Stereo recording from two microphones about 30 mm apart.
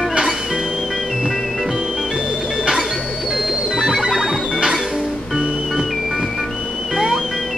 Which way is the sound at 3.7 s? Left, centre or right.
Centre.